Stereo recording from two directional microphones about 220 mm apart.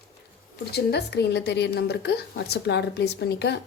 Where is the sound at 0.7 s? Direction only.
50° left (ahead or behind).